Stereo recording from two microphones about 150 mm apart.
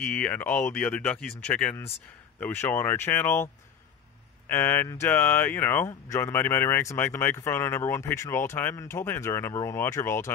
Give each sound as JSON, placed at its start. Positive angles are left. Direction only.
{"t": 0.0, "sound": "speech", "side_deg": 10}
{"t": 4.5, "sound": "speech", "side_deg": 15}